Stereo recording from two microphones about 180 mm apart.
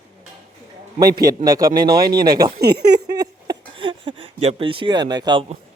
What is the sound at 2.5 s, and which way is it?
Speech, 65° right (ahead or behind).